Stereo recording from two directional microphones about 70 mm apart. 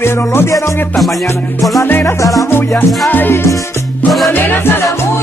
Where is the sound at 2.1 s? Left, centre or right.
Left.